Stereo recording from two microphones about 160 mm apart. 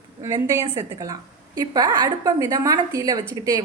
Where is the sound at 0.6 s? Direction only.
25° right (ahead or behind).